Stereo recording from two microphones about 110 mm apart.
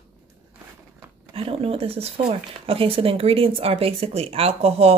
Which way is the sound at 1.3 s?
60° right (ahead or behind).